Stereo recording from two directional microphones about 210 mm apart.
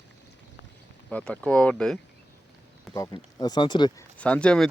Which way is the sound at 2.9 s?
15° left (ahead or behind).